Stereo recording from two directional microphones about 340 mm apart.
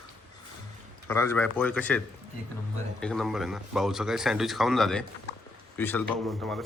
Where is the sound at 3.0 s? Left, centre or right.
Centre.